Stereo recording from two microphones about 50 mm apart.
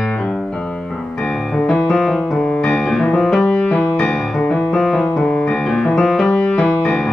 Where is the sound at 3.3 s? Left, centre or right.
Centre.